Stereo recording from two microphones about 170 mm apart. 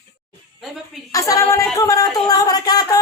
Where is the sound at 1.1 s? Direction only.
20° left (ahead or behind).